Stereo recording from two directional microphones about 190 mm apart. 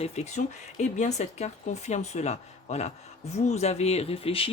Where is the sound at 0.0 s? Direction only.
35° left (ahead or behind).